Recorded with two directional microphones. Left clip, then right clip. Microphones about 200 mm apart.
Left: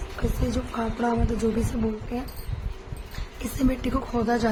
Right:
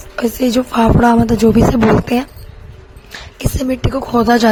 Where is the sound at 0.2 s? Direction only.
50° right (ahead or behind).